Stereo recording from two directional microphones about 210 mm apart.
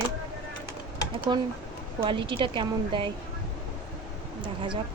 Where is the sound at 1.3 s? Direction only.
20° right (ahead or behind).